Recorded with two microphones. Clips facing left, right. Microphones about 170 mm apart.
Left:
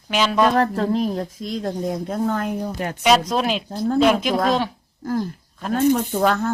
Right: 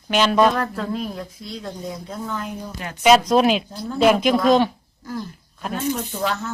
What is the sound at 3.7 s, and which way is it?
Speech, 50° left (ahead or behind).